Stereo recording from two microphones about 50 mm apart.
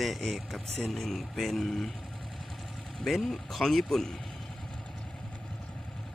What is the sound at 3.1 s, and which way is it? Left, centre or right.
Speech, centre.